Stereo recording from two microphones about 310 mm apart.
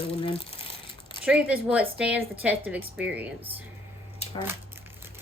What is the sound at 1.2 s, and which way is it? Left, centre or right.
A woman's voice, centre.